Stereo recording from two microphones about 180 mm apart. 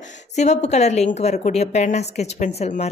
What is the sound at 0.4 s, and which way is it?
A woman's voice, 40° left (ahead or behind).